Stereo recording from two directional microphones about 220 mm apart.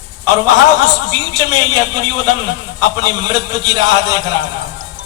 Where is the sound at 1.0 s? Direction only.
20° right (ahead or behind).